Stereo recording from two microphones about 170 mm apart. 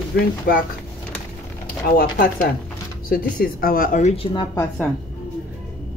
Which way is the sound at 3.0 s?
60° left (ahead or behind).